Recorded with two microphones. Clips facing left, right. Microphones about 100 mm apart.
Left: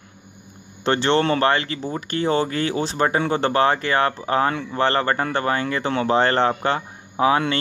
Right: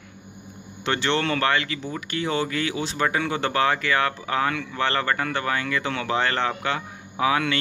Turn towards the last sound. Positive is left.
turn(degrees=35)  # may be behind; listen again after turning